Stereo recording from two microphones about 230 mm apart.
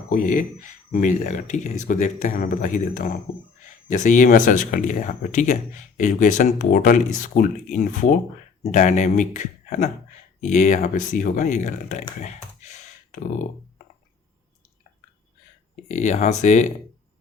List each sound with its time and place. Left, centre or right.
0.1 s speech: left
12.2 s a sound: left
15.7 s speech: left